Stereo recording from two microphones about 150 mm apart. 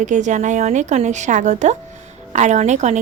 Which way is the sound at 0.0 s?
55° right (ahead or behind).